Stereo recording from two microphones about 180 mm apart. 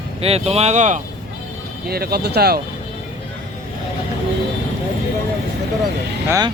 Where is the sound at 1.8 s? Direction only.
60° right (ahead or behind).